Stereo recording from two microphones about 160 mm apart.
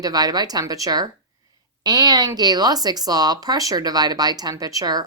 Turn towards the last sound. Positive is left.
turn(degrees=-25)  # may be behind; listen again after turning